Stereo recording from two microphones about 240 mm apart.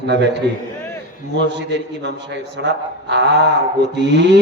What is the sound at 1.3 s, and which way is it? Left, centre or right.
A man's voice, right.